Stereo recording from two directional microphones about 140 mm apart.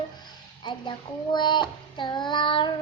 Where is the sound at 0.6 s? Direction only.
35° left (ahead or behind).